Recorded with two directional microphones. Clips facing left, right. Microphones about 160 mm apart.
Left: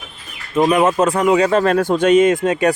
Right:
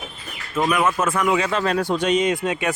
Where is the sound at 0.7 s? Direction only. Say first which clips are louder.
Left 5 dB; 35° left (ahead or behind).